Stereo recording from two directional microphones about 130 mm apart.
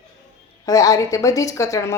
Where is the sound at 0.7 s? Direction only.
25° left (ahead or behind).